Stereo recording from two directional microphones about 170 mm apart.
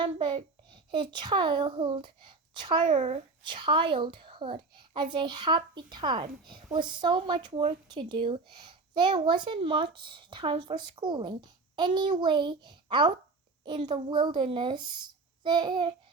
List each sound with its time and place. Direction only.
0.0 s speech: 25° right (ahead or behind)